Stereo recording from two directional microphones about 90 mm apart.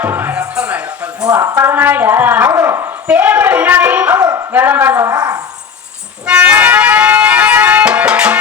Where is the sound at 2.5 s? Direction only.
30° right (ahead or behind).